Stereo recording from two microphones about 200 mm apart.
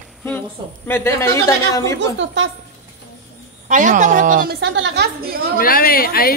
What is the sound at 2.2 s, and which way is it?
Speech, 65° right (ahead or behind).